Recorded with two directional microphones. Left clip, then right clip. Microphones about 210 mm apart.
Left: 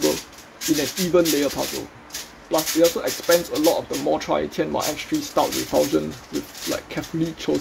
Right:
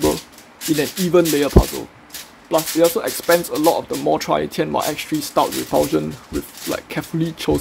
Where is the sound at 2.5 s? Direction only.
15° right (ahead or behind).